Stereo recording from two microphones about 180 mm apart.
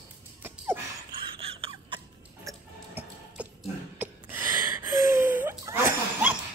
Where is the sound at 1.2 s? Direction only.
30° right (ahead or behind).